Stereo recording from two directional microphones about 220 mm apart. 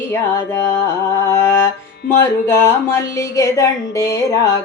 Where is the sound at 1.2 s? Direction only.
10° left (ahead or behind).